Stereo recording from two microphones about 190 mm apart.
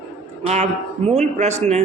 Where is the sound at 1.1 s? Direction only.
35° right (ahead or behind).